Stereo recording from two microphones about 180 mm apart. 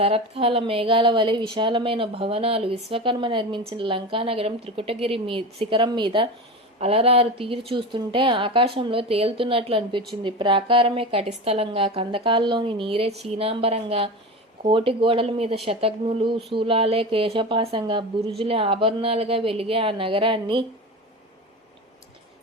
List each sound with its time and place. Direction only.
0.0 s a woman's voice: 35° right (ahead or behind)